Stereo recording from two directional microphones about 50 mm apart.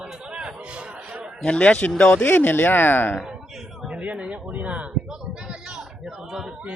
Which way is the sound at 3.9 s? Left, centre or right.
Right.